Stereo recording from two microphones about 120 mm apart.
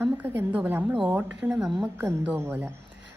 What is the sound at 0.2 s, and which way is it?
Speech, 15° right (ahead or behind).